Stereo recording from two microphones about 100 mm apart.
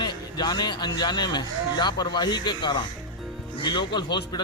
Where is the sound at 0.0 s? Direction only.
45° left (ahead or behind).